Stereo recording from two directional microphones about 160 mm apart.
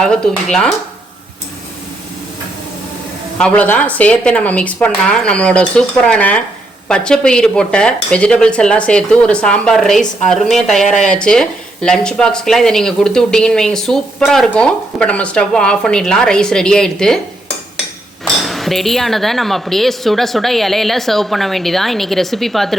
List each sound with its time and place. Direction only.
0.0 s speech: 5° left (ahead or behind)
3.3 s speech: 5° left (ahead or behind)
18.4 s speech: centre (ahead or behind)